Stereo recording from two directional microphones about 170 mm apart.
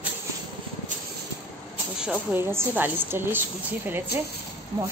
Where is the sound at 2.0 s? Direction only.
10° right (ahead or behind).